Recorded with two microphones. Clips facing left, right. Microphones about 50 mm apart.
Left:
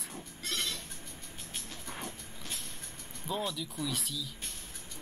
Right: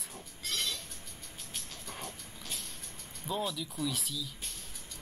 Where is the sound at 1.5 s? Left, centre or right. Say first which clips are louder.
Left 1 dB; centre.